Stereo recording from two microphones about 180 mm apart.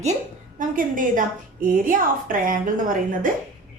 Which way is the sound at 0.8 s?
50° right (ahead or behind).